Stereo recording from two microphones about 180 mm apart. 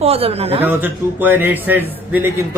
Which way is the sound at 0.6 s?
10° right (ahead or behind).